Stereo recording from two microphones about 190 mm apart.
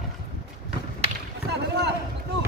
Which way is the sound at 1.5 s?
65° right (ahead or behind).